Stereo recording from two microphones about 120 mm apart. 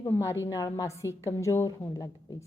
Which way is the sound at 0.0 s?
20° left (ahead or behind).